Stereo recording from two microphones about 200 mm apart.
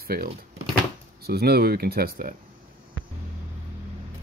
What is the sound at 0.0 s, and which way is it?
Speech, 50° right (ahead or behind).